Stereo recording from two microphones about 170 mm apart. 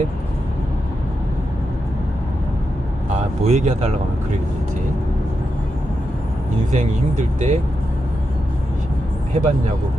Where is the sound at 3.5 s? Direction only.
45° right (ahead or behind).